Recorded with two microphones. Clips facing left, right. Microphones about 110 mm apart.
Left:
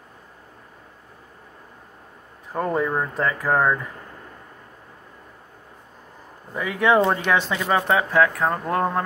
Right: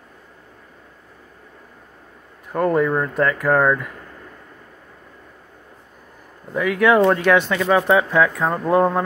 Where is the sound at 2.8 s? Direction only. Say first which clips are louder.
Right 4 dB; 15° left (ahead or behind).